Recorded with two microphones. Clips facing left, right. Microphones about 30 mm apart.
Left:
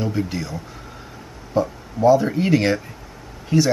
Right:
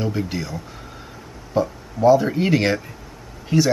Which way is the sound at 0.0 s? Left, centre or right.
Centre.